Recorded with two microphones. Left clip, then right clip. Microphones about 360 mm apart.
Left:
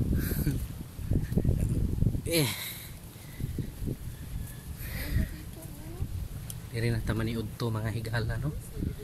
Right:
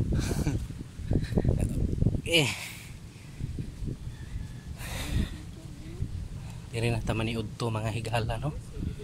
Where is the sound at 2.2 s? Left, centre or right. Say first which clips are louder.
Right 4 dB; centre.